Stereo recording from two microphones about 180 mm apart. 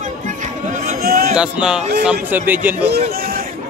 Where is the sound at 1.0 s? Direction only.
60° right (ahead or behind).